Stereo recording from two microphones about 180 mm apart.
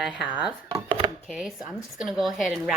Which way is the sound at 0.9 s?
20° right (ahead or behind).